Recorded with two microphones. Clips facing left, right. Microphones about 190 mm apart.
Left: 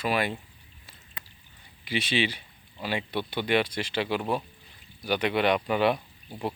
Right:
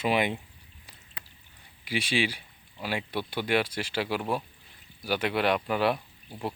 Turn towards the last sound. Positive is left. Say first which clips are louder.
# left 2 dB
turn(degrees=0)  # may be behind; listen again after turning